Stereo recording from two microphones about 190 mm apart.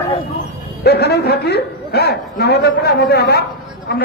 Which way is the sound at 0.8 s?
60° left (ahead or behind).